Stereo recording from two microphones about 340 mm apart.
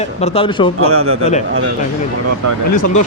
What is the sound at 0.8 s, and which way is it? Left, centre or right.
Speech, right.